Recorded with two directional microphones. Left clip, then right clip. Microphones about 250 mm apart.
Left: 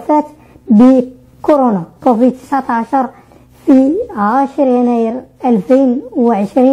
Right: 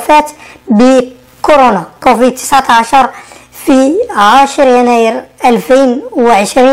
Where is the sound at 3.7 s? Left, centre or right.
Right.